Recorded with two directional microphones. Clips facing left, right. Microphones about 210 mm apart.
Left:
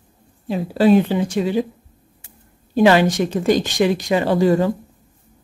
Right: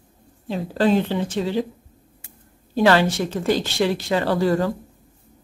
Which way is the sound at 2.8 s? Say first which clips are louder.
Left 3 dB; 15° left (ahead or behind).